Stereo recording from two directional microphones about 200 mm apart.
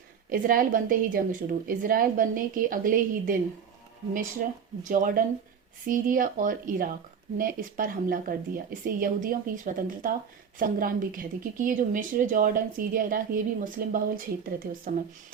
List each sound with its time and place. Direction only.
0.3 s a woman's voice: 45° right (ahead or behind)
4.4 s a woman's voice: 45° right (ahead or behind)